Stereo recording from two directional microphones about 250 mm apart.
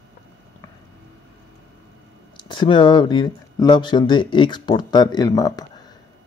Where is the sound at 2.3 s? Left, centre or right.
Centre.